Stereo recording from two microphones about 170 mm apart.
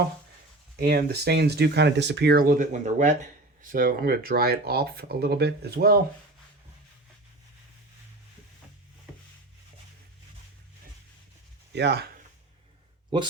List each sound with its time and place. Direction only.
0.8 s speech: 65° right (ahead or behind)
11.7 s speech: 85° right